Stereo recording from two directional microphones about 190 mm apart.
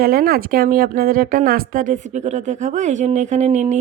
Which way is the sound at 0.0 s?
50° right (ahead or behind).